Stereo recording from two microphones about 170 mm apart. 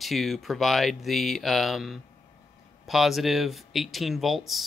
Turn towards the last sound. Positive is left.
turn(degrees=0)  # may be behind; listen again after turning